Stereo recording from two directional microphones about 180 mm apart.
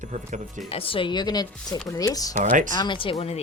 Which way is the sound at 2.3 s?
45° right (ahead or behind).